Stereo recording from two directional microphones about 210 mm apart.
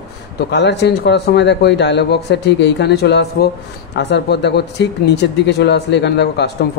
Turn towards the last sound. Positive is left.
turn(degrees=55)  # may be behind; listen again after turning